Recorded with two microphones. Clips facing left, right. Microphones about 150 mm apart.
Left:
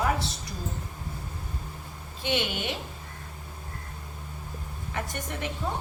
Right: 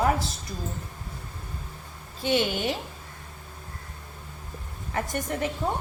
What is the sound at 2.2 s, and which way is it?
Speech, 40° right (ahead or behind).